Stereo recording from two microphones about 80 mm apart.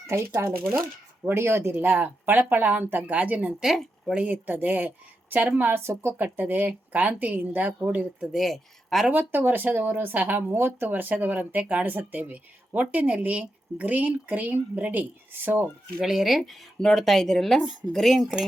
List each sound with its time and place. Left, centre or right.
0.1 s speech: right; by 3.5 s centre
3.6 s speech: centre
4.1 s speech: centre; by 6.1 s right
6.1 s speech: right
8.4 s speech: centre
9.1 s speech: right
16.0 s speech: centre